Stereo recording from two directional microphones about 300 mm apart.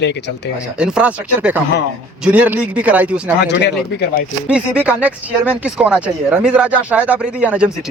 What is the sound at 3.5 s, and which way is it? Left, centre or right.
Speech, left.